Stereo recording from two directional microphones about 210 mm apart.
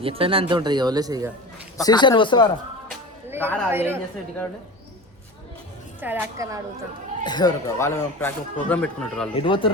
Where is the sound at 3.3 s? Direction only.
10° right (ahead or behind).